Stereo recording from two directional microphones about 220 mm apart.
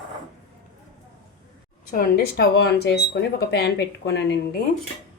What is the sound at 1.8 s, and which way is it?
Speech, 45° left (ahead or behind).